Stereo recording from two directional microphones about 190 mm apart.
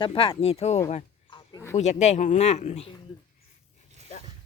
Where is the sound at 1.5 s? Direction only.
15° left (ahead or behind).